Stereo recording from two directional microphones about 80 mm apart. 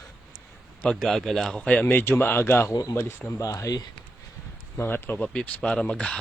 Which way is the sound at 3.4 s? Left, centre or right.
Left.